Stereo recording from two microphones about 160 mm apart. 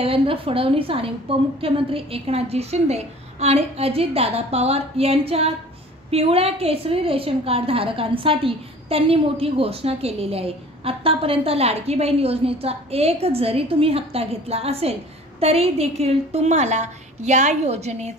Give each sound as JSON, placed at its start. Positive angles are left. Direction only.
{"t": 0.0, "sound": "a woman's voice", "side_deg": -35}